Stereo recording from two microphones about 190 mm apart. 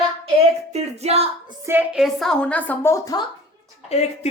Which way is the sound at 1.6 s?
10° right (ahead or behind).